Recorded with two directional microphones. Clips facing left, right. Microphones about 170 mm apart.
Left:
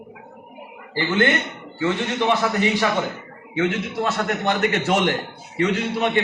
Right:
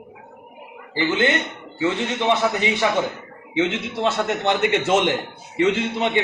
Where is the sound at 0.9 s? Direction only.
20° right (ahead or behind).